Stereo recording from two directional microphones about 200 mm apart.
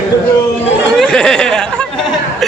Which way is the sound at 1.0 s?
5° left (ahead or behind).